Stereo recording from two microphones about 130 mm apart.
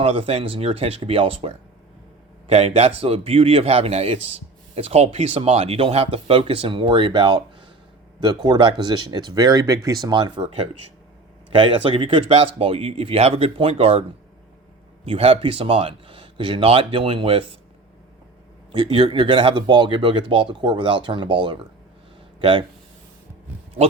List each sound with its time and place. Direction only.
0.0 s speech: 45° right (ahead or behind)
15.0 s speech: 45° right (ahead or behind)
18.7 s speech: 40° right (ahead or behind)